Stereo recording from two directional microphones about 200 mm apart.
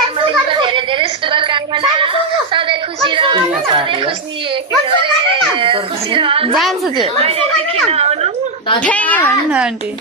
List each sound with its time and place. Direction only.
0.3 s a sound: 25° right (ahead or behind)
5.0 s a child's voice: 25° right (ahead or behind)
6.5 s a woman's voice: centre (ahead or behind)
6.9 s a child's voice: 25° right (ahead or behind)
7.9 s a sound: 30° right (ahead or behind)
8.8 s a child's voice: 5° left (ahead or behind)